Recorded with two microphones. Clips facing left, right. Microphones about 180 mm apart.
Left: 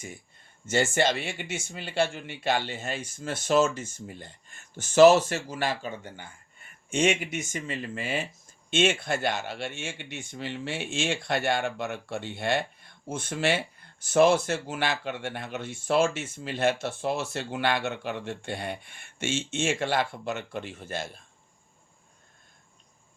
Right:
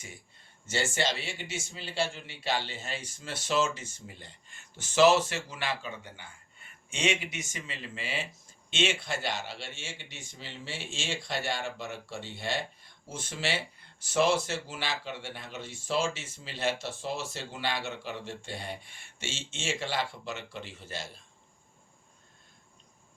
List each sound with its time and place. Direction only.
0.7 s speech: 50° left (ahead or behind)